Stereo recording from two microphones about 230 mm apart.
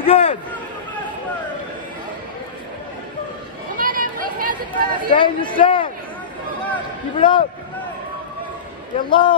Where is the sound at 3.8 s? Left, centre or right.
Right.